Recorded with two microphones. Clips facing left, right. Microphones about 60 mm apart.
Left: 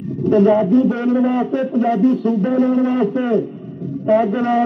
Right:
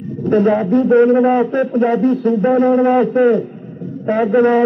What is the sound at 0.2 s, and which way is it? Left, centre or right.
A man's voice, right.